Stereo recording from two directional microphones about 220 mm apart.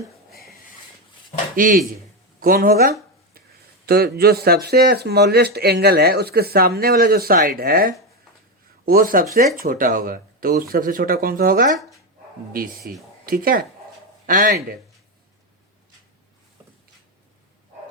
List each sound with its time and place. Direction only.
1.5 s speech: 40° right (ahead or behind)
2.4 s a sound: 40° right (ahead or behind)
3.8 s speech: 45° right (ahead or behind)